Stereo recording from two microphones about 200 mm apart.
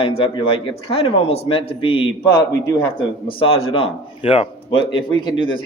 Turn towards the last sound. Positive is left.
turn(degrees=25)  # may be behind; listen again after turning